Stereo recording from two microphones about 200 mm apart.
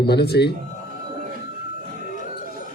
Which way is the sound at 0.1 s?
55° left (ahead or behind).